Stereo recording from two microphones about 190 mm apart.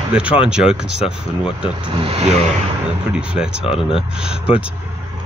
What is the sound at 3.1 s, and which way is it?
Speech, 5° right (ahead or behind).